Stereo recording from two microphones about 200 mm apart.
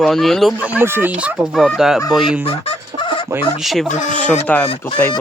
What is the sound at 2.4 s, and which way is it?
Fowl, 25° left (ahead or behind).